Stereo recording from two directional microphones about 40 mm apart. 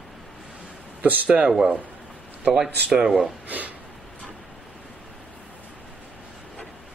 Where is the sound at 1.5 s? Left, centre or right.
Centre.